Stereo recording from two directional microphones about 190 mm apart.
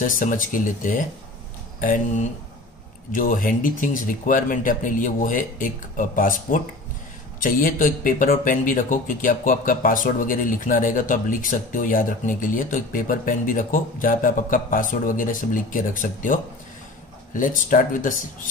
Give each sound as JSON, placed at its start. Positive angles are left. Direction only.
{"t": 0.0, "sound": "speech", "side_deg": 45}
{"t": 3.1, "sound": "speech", "side_deg": 45}